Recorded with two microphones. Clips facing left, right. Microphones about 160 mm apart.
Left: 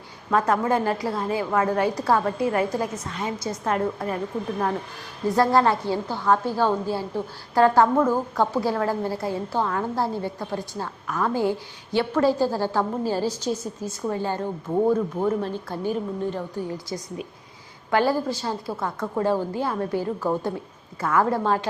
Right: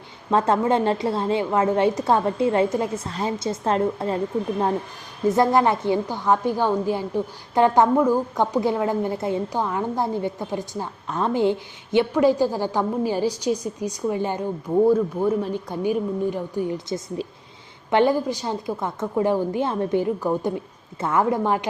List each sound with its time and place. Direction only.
0.3 s a woman's voice: 25° right (ahead or behind)
5.3 s a woman's voice: 20° right (ahead or behind)
17.9 s a woman's voice: 20° right (ahead or behind)